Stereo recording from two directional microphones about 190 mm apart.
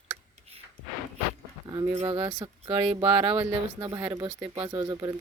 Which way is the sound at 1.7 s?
20° right (ahead or behind).